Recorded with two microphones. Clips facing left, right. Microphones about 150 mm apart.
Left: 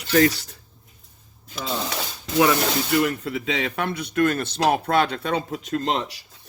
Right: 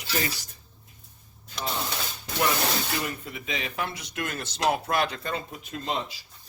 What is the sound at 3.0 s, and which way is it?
Speech, 75° left (ahead or behind).